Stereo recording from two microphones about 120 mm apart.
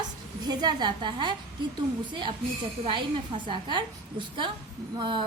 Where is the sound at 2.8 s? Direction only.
45° right (ahead or behind).